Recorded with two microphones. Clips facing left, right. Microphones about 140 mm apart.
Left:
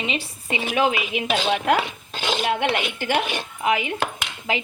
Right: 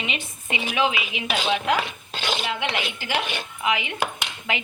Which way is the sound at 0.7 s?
45° left (ahead or behind).